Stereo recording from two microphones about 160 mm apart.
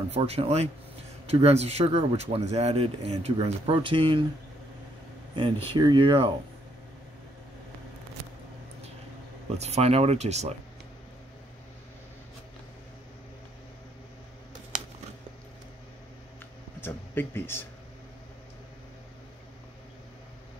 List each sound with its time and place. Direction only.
0.1 s speech: 40° right (ahead or behind)
5.3 s speech: 30° right (ahead or behind)
9.6 s speech: 40° right (ahead or behind)
16.8 s speech: 15° left (ahead or behind)